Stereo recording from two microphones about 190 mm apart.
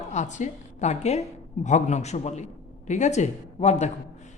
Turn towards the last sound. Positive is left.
turn(degrees=35)  # may be behind; listen again after turning